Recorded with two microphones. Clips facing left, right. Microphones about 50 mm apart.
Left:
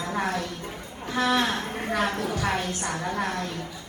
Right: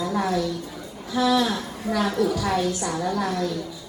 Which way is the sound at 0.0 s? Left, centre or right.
Left.